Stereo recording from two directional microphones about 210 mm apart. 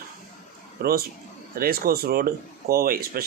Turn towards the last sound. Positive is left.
turn(degrees=-45)  # may be behind; listen again after turning